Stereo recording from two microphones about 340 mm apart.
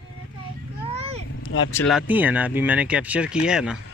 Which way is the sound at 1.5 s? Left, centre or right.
Centre.